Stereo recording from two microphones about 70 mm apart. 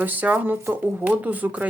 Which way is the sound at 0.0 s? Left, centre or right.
Right.